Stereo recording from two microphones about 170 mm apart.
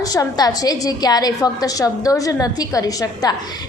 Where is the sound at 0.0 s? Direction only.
20° left (ahead or behind).